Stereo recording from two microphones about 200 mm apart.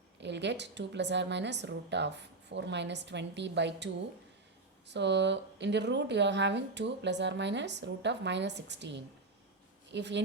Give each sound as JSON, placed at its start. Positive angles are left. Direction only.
{"t": 0.2, "sound": "speech", "side_deg": -60}
{"t": 4.9, "sound": "speech", "side_deg": -60}